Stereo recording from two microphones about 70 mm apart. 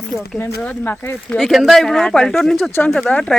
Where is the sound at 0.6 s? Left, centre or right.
Left.